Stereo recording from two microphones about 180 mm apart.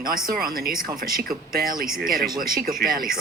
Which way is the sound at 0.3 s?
55° right (ahead or behind).